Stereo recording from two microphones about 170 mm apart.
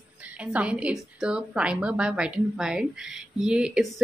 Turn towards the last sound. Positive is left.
turn(degrees=-5)  # may be behind; listen again after turning